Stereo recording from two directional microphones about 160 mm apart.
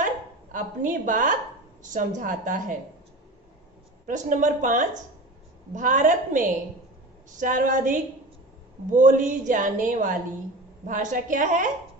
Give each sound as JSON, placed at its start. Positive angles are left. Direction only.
{"t": 0.0, "sound": "speech", "side_deg": -55}
{"t": 4.1, "sound": "a woman's voice", "side_deg": -50}